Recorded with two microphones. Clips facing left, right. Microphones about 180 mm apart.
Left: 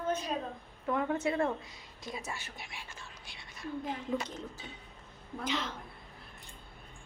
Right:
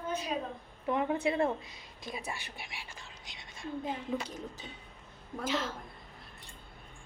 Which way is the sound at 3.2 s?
20° right (ahead or behind).